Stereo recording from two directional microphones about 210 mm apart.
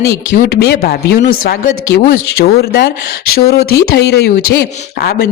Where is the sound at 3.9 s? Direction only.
50° left (ahead or behind).